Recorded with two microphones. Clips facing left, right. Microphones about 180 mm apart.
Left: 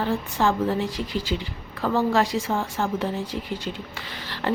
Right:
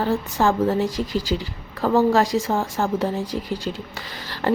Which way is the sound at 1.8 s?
40° right (ahead or behind).